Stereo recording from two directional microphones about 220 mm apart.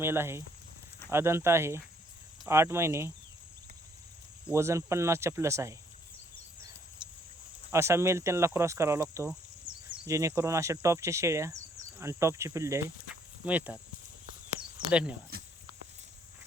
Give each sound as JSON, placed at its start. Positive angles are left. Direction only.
{"t": 0.0, "sound": "speech", "side_deg": -10}
{"t": 4.4, "sound": "speech", "side_deg": -10}
{"t": 7.0, "sound": "a sound", "side_deg": -20}
{"t": 7.7, "sound": "speech", "side_deg": -10}
{"t": 14.8, "sound": "speech", "side_deg": -5}